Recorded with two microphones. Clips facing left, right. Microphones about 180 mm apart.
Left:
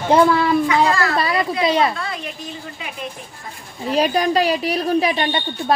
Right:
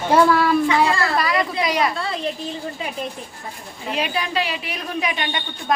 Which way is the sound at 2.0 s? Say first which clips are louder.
Right 3 dB; 30° right (ahead or behind).